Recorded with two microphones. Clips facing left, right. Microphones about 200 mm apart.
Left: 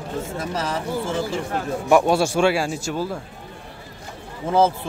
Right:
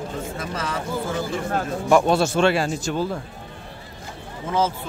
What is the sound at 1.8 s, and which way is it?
Speech, 10° left (ahead or behind).